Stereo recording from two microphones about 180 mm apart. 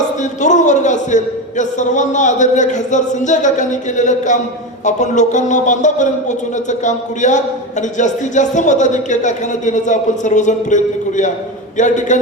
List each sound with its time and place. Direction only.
0.2 s a man's voice: 40° left (ahead or behind)